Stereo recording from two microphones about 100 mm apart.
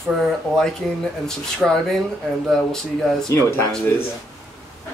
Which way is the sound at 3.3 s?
25° left (ahead or behind).